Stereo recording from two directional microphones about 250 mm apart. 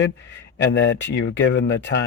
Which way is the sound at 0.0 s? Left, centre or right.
Left.